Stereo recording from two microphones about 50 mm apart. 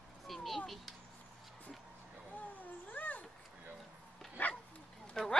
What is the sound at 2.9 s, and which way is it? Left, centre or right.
Cat, left.